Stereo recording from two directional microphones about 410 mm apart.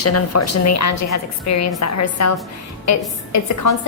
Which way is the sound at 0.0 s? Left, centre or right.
Left.